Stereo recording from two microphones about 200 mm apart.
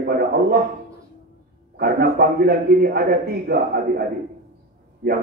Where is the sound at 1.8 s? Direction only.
50° right (ahead or behind).